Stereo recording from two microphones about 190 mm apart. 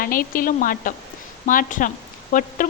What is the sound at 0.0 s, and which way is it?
A woman's voice, 45° left (ahead or behind).